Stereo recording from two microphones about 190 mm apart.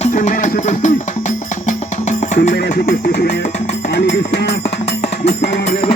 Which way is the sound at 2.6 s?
50° left (ahead or behind).